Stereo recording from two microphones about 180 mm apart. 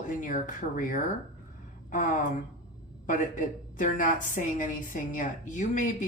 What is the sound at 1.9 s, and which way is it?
Speech, 45° left (ahead or behind).